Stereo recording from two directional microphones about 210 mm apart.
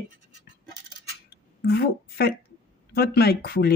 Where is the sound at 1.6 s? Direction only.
50° left (ahead or behind).